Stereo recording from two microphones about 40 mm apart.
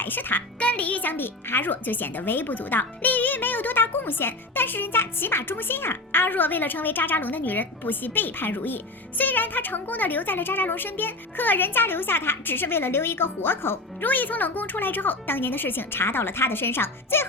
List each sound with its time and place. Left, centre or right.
0.0 s a child's voice: left
0.6 s a child's voice: left
14.0 s a child's voice: left